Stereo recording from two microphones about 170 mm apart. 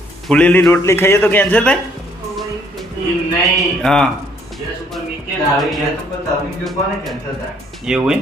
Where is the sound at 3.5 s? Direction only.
5° left (ahead or behind).